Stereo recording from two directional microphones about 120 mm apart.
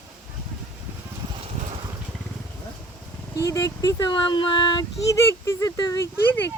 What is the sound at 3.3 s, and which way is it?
Speech, 30° left (ahead or behind).